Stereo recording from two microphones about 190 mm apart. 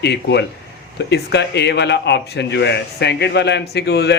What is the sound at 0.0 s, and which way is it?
Speech, 65° left (ahead or behind).